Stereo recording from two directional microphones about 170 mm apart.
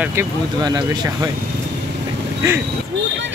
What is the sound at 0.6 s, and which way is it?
Speech, 25° right (ahead or behind).